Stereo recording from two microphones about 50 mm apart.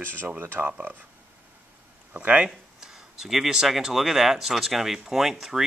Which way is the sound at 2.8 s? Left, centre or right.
Centre.